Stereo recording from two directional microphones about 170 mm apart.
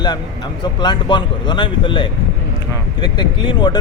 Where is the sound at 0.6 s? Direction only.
25° left (ahead or behind).